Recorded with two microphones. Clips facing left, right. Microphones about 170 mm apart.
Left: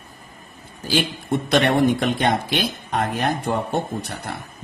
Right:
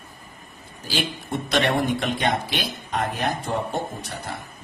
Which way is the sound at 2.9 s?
55° left (ahead or behind).